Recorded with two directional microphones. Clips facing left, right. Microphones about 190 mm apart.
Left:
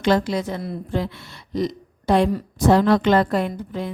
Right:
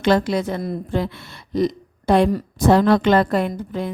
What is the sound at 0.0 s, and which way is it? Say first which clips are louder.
A woman's voice: right 2 dB; 60° right (ahead or behind).